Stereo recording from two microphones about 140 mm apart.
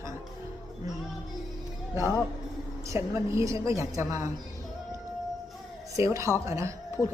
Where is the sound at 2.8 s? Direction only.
20° right (ahead or behind).